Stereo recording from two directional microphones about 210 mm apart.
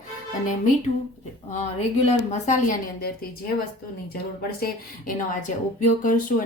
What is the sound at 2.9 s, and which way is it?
Speech, 45° left (ahead or behind).